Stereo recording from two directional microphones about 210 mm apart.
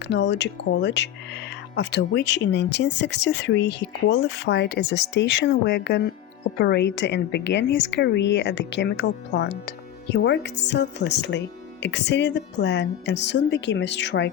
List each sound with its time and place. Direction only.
0.1 s speech: 55° left (ahead or behind)